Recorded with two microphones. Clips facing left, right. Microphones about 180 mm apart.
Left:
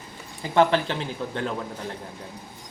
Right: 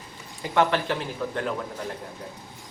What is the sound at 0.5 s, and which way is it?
Speech, 30° left (ahead or behind).